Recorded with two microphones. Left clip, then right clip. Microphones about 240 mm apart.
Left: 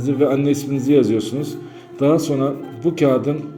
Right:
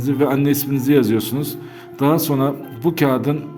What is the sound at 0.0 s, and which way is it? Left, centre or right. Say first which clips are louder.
A man's voice: left 1 dB; right.